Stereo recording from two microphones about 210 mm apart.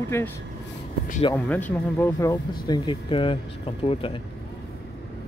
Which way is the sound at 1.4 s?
10° left (ahead or behind).